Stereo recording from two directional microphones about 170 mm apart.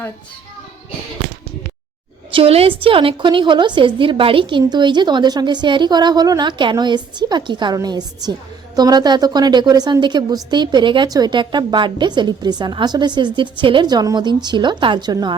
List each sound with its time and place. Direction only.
2.3 s a woman's voice: 35° right (ahead or behind)